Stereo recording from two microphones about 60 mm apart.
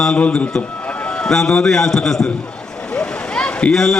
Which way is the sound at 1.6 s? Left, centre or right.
Centre.